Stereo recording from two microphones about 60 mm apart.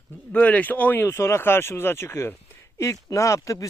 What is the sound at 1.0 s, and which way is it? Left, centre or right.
Speech, left.